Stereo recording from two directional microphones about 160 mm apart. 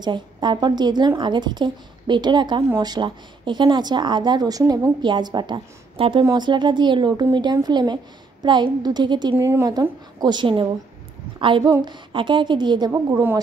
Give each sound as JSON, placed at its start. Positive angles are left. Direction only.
{"t": 0.0, "sound": "speech", "side_deg": -30}
{"t": 9.4, "sound": "speech", "side_deg": -20}
{"t": 12.9, "sound": "a woman's voice", "side_deg": -15}